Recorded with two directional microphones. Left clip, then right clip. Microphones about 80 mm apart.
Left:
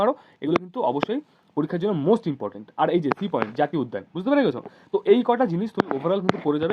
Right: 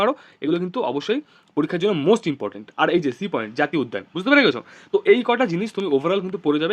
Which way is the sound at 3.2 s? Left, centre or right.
Right.